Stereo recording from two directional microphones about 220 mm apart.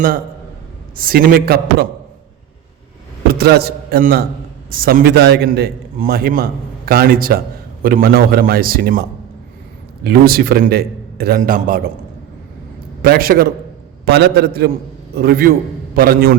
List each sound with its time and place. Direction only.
0.9 s a man's voice: 40° right (ahead or behind)
3.2 s a man's voice: 45° right (ahead or behind)
13.0 s a man's voice: 40° right (ahead or behind)